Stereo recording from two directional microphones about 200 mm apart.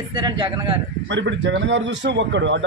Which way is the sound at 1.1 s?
65° right (ahead or behind).